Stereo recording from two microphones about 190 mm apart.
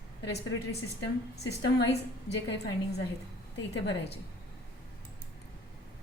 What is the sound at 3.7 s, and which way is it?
Speech, 65° left (ahead or behind).